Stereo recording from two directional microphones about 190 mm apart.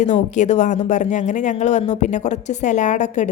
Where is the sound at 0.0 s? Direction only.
40° left (ahead or behind).